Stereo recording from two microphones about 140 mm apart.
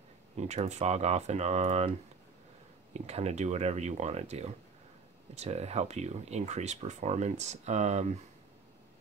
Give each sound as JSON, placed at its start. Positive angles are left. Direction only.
{"t": 0.4, "sound": "speech", "side_deg": -55}
{"t": 2.9, "sound": "speech", "side_deg": -50}